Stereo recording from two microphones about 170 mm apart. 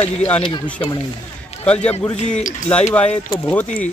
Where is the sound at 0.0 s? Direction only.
10° left (ahead or behind).